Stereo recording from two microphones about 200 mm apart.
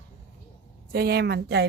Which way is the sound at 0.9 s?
50° right (ahead or behind).